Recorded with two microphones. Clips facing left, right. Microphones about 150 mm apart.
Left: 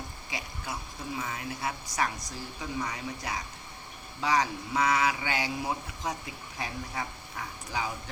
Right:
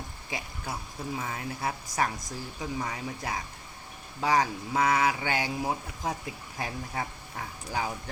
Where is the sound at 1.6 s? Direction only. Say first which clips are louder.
Right 2 dB; 45° right (ahead or behind).